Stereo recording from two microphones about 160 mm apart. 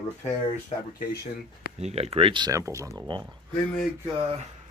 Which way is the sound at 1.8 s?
40° right (ahead or behind).